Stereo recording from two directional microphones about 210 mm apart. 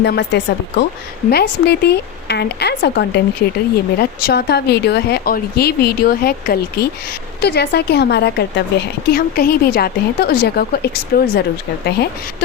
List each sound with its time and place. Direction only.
0.0 s speech: 55° left (ahead or behind)